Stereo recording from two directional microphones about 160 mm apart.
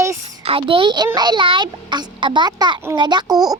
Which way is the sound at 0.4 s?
35° right (ahead or behind).